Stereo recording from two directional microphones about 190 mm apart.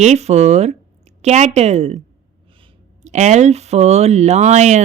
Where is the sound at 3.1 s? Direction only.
40° right (ahead or behind).